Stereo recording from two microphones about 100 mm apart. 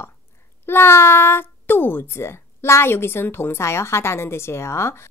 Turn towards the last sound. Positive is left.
turn(degrees=25)  # may be behind; listen again after turning